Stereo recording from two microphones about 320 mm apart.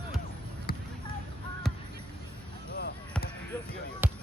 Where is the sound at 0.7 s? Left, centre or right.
Left.